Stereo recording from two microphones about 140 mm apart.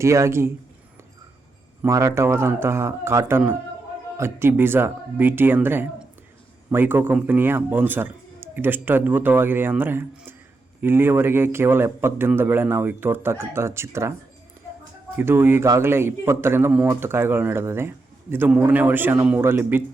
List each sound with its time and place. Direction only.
0.0 s a man's voice: 20° right (ahead or behind)
1.8 s a man's voice: 20° right (ahead or behind)
15.2 s a man's voice: 15° right (ahead or behind)